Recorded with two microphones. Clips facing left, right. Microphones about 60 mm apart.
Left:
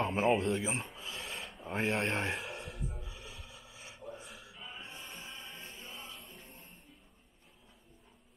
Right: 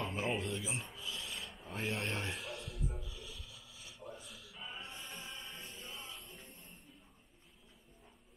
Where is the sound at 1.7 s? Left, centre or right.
Left.